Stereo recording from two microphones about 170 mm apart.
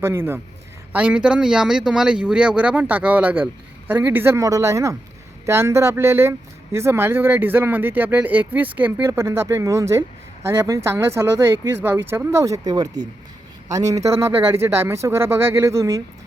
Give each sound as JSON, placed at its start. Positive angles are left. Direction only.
{"t": 0.0, "sound": "speech", "side_deg": -15}